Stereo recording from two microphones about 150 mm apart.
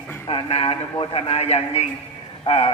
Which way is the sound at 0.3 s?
35° left (ahead or behind).